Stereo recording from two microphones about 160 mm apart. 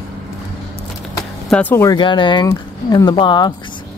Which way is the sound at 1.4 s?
10° left (ahead or behind).